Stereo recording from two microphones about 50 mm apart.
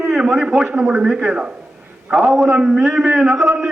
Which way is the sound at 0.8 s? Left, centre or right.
Centre.